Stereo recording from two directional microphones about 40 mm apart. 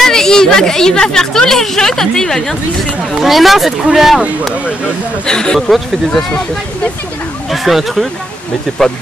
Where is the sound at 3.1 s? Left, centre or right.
Centre.